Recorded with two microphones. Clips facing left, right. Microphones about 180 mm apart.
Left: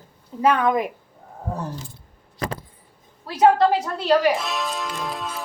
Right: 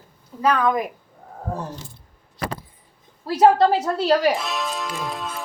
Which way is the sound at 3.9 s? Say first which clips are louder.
Left 2 dB; 35° right (ahead or behind).